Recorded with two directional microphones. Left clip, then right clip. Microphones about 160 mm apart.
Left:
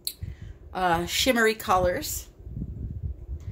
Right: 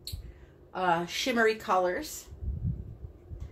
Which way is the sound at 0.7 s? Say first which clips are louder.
Left 4 dB; 90° left.